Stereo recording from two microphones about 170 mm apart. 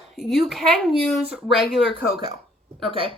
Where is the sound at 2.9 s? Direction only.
30° right (ahead or behind).